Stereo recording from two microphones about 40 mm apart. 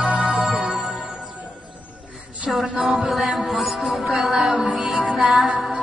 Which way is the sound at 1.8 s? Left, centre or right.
Right.